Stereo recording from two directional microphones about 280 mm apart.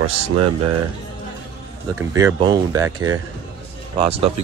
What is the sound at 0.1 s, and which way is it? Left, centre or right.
Speech, right.